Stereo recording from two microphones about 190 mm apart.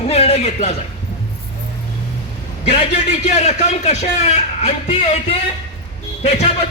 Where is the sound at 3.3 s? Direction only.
40° left (ahead or behind).